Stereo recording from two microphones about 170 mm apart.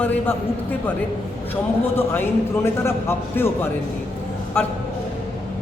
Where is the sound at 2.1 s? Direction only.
15° left (ahead or behind).